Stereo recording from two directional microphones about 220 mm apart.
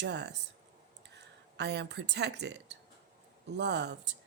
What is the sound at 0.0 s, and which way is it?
A woman's voice, 50° right (ahead or behind).